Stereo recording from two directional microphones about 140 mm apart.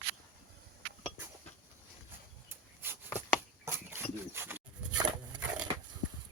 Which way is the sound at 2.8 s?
15° right (ahead or behind).